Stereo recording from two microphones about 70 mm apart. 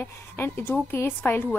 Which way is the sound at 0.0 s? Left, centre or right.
Left.